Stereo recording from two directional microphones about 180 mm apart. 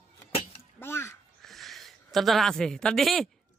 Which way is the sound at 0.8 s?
15° left (ahead or behind).